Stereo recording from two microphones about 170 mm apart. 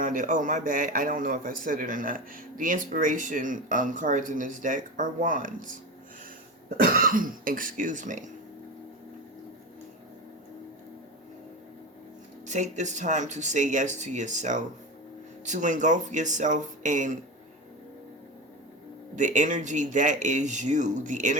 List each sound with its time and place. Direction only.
0.0 s a man's voice: 50° right (ahead or behind)
6.7 s a man's voice: 60° right (ahead or behind)
12.5 s a man's voice: 45° right (ahead or behind)
19.1 s a man's voice: 45° right (ahead or behind)